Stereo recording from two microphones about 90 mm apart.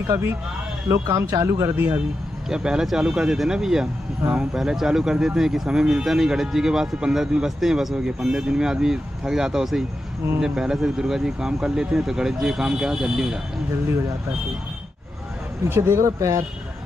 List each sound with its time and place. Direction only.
0.1 s a man's voice: 30° right (ahead or behind)
2.5 s speech: 10° right (ahead or behind)
15.7 s speech: 30° right (ahead or behind)